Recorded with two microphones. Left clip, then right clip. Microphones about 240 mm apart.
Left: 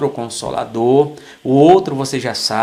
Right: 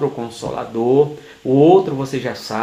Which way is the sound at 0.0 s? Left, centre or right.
Left.